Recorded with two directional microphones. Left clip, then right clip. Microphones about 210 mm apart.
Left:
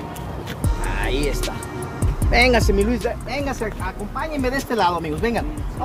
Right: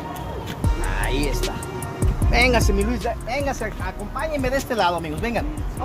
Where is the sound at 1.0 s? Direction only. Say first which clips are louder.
Left 2 dB; 25° right (ahead or behind).